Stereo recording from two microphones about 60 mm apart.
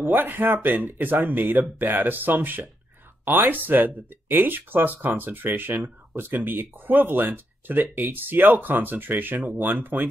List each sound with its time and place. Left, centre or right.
0.0 s speech: right